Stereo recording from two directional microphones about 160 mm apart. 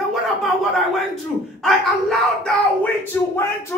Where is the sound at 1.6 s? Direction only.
5° left (ahead or behind).